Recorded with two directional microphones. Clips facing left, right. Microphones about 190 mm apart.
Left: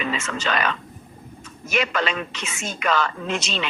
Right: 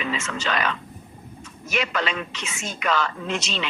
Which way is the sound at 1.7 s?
50° left (ahead or behind).